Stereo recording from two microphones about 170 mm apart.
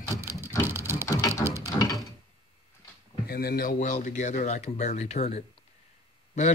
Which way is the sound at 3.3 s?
65° left (ahead or behind).